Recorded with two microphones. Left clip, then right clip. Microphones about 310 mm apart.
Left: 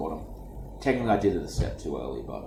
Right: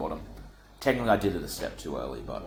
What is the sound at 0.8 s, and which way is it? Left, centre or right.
Speech, centre.